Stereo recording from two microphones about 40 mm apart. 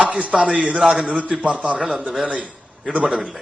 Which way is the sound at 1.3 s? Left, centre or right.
Right.